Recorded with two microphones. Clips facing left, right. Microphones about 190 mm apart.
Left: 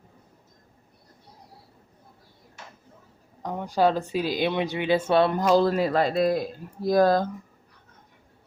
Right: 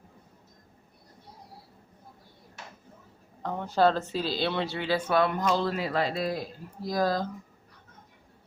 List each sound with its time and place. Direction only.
3.4 s speech: 15° left (ahead or behind); by 7.3 s 55° left (ahead or behind)